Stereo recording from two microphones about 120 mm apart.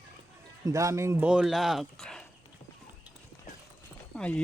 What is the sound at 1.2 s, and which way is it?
Speech, 10° right (ahead or behind).